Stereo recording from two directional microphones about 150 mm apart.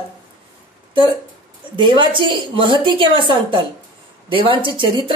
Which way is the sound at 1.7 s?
35° right (ahead or behind).